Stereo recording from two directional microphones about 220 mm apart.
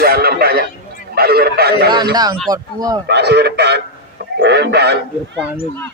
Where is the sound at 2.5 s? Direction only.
15° right (ahead or behind).